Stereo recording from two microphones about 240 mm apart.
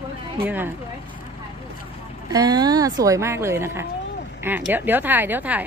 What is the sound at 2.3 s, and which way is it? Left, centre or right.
A woman's voice, centre.